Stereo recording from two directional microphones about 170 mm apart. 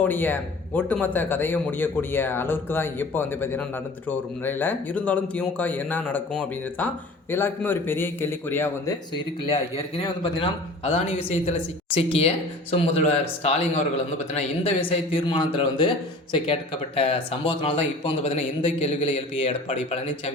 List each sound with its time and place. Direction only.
0.0 s a man's voice: 10° left (ahead or behind)
9.4 s a man's voice: 30° left (ahead or behind)